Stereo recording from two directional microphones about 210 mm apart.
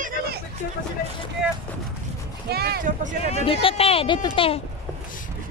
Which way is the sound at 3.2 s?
30° left (ahead or behind).